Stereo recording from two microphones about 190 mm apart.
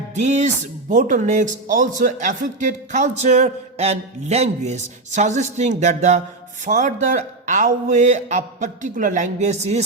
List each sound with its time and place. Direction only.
0.1 s speech: 35° right (ahead or behind)